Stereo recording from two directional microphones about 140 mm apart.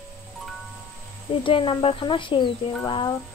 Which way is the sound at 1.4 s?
35° left (ahead or behind).